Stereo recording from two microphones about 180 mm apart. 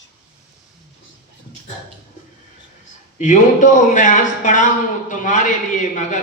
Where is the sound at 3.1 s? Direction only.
45° left (ahead or behind).